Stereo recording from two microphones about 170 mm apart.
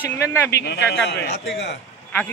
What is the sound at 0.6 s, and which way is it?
Speech, 80° left.